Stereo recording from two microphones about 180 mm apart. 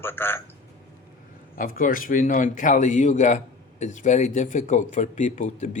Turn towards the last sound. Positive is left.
turn(degrees=40)  # may be behind; listen again after turning